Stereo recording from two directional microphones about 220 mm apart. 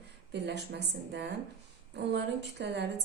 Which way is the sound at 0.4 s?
50° right (ahead or behind).